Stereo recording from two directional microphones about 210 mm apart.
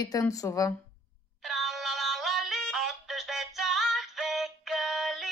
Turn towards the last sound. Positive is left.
turn(degrees=0)  # may be behind; listen again after turning